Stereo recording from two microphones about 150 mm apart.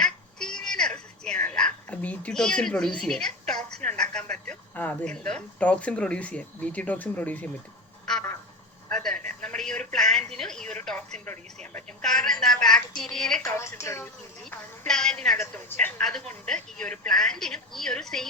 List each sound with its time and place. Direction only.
0.0 s music: 5° left (ahead or behind)
3.8 s speech: 5° left (ahead or behind)
8.1 s quack: 5° left (ahead or behind)
9.4 s a sound: 5° left (ahead or behind)
12.0 s a woman's voice: 5° left (ahead or behind)
13.5 s speech: 20° left (ahead or behind)
14.8 s a woman's voice: 5° left (ahead or behind)